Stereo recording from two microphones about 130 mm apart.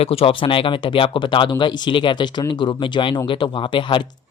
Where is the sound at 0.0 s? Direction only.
50° left (ahead or behind).